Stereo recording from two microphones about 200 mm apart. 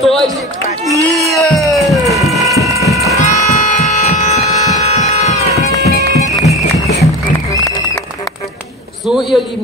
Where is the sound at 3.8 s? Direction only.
30° left (ahead or behind).